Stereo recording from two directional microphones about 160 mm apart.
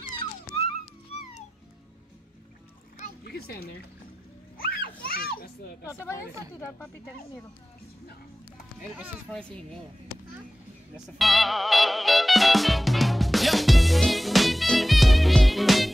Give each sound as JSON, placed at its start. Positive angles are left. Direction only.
{"t": 3.3, "sound": "a woman's voice", "side_deg": 80}
{"t": 4.6, "sound": "children playing", "side_deg": 75}
{"t": 9.3, "sound": "speech", "side_deg": 5}
{"t": 11.1, "sound": "music", "side_deg": 0}